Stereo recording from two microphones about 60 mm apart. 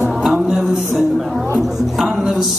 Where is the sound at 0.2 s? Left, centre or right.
Centre.